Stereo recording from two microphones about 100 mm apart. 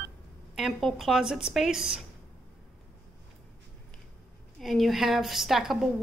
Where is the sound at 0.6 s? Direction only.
Centre (ahead or behind).